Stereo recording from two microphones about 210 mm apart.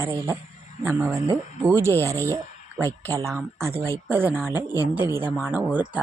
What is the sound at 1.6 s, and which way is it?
Speech, 10° right (ahead or behind).